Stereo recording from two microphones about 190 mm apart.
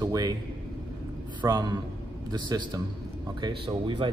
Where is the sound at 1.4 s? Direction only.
20° right (ahead or behind).